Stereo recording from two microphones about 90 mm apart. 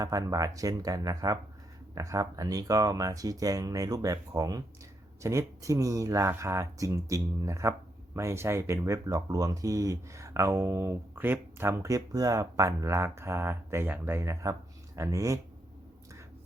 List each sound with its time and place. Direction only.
0.0 s speech: 40° right (ahead or behind)